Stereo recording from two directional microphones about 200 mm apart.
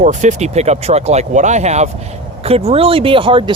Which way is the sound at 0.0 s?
35° right (ahead or behind).